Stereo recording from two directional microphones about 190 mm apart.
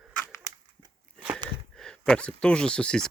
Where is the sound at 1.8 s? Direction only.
5° left (ahead or behind).